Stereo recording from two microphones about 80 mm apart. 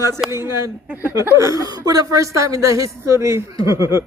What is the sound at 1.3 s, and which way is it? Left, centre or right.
A woman's voice, right.